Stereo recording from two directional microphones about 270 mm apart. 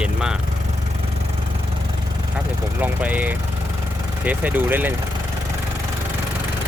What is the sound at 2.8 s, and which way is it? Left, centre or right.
Speech, centre.